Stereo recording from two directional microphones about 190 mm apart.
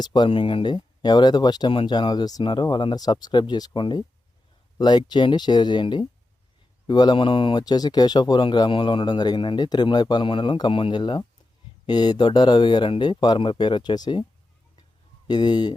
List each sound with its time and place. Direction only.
0.0 s speech: 20° left (ahead or behind)
15.3 s speech: 20° left (ahead or behind)